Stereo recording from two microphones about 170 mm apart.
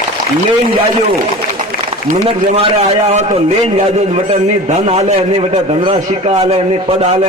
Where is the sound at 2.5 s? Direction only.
40° right (ahead or behind).